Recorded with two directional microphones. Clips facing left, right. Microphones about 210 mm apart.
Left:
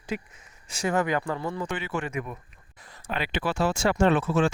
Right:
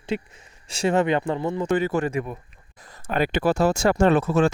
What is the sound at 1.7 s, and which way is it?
Speech, 40° right (ahead or behind).